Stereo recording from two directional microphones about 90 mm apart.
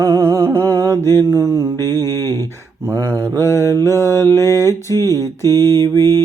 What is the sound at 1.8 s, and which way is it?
Mantra, 35° left (ahead or behind).